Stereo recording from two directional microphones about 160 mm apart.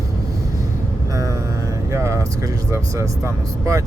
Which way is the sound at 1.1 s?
20° right (ahead or behind).